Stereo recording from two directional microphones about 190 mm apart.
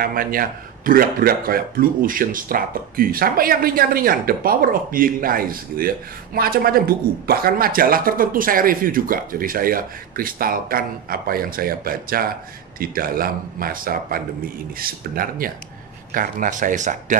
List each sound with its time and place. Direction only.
0.0 s speech: 50° right (ahead or behind)